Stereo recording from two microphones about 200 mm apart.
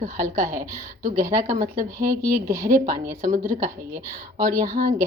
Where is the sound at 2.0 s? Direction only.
15° right (ahead or behind).